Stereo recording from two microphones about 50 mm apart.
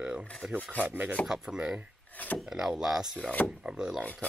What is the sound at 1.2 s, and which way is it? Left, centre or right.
Speech, centre.